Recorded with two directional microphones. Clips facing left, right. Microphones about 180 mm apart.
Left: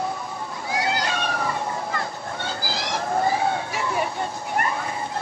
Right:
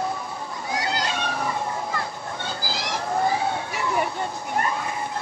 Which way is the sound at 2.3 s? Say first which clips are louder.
Left 2 dB; 15° right (ahead or behind).